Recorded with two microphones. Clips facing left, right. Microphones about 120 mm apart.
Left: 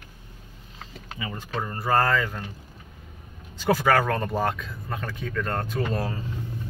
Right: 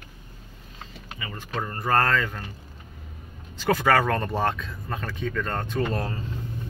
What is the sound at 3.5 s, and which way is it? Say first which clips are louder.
Speech: even; 10° left (ahead or behind).